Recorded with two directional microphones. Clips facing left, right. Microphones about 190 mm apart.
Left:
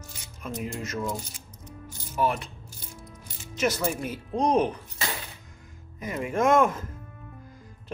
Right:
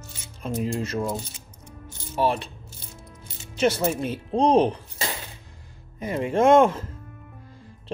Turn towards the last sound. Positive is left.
turn(degrees=-30)  # may be behind; listen again after turning